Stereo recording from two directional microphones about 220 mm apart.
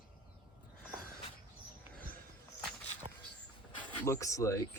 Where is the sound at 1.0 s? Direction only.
40° left (ahead or behind).